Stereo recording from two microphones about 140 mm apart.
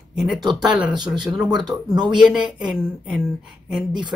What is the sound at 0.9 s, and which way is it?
Speech, 30° right (ahead or behind).